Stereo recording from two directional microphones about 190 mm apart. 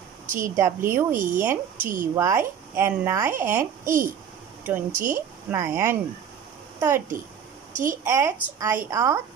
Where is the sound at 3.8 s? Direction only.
45° right (ahead or behind).